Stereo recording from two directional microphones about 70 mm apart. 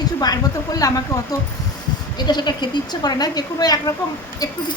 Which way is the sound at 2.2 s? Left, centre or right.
Left.